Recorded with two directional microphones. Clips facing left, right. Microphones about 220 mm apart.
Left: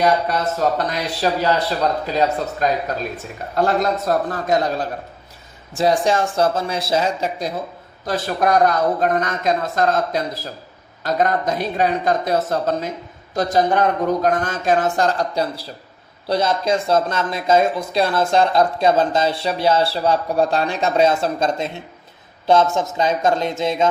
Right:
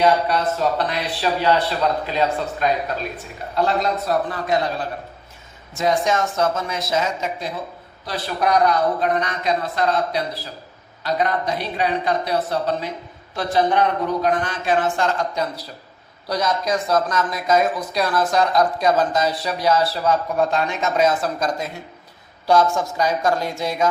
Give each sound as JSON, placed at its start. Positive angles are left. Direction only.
{"t": 0.3, "sound": "speech", "side_deg": 45}
{"t": 5.7, "sound": "speech", "side_deg": 30}